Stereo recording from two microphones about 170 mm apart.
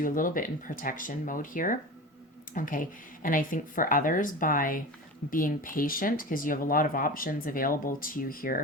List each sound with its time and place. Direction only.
0.0 s speech: 55° left (ahead or behind)